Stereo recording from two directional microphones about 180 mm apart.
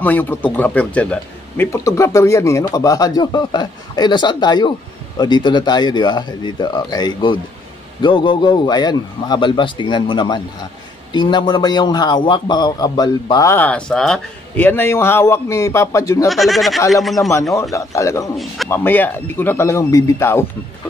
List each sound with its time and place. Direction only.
0.0 s a man's voice: 10° left (ahead or behind)
16.3 s speech: centre (ahead or behind)
17.6 s a man's voice: 15° left (ahead or behind)